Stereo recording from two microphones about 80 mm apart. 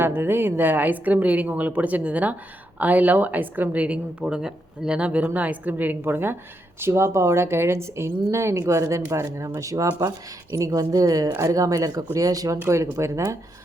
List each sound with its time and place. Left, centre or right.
0.0 s a woman's voice: right